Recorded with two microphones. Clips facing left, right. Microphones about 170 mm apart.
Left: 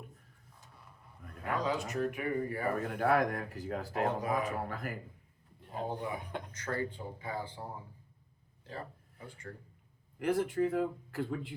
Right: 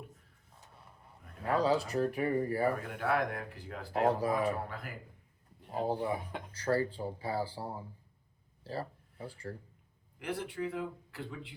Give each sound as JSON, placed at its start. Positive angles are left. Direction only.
{"t": 1.5, "sound": "speech", "side_deg": -35}
{"t": 2.7, "sound": "speech", "side_deg": 45}
{"t": 4.0, "sound": "speech", "side_deg": -35}
{"t": 4.7, "sound": "speech", "side_deg": 45}
{"t": 5.8, "sound": "speech", "side_deg": -35}
{"t": 10.2, "sound": "speech", "side_deg": 45}